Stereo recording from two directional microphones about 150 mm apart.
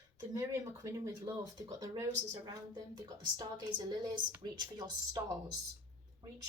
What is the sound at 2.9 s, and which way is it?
Speech, 30° right (ahead or behind).